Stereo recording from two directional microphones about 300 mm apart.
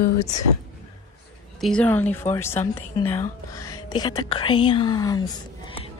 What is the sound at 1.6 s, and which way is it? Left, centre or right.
Speech, centre.